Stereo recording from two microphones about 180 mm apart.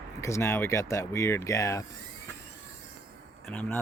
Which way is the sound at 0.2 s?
15° left (ahead or behind).